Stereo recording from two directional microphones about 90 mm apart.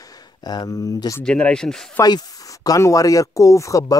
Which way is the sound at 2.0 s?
45° left (ahead or behind).